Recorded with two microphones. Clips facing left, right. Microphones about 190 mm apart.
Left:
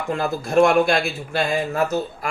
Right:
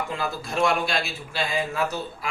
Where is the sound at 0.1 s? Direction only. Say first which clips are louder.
Left 8 dB; 50° left (ahead or behind).